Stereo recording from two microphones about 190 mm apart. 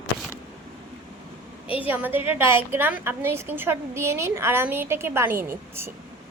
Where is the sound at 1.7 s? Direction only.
10° right (ahead or behind).